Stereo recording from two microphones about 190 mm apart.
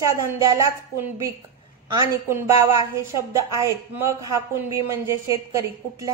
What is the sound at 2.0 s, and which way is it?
A woman's voice, 15° right (ahead or behind).